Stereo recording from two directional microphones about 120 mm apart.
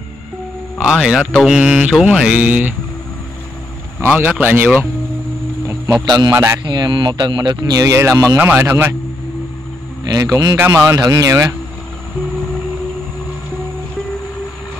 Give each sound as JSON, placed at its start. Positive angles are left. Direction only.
{"t": 0.7, "sound": "a man's voice", "side_deg": -5}
{"t": 1.4, "sound": "mantra", "side_deg": -5}
{"t": 4.0, "sound": "mantra", "side_deg": -15}
{"t": 6.0, "sound": "speech", "side_deg": -35}
{"t": 6.3, "sound": "speech", "side_deg": -25}
{"t": 6.6, "sound": "speech", "side_deg": -35}
{"t": 8.5, "sound": "mantra", "side_deg": -15}
{"t": 10.0, "sound": "speech", "side_deg": -30}